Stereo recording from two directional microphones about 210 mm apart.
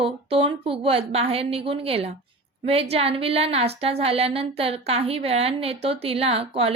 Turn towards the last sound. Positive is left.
turn(degrees=-25)  # may be behind; listen again after turning